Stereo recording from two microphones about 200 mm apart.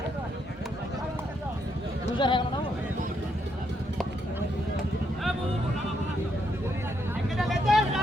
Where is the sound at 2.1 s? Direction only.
25° left (ahead or behind).